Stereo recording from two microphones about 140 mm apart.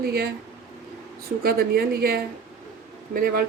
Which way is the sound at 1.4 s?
90° right.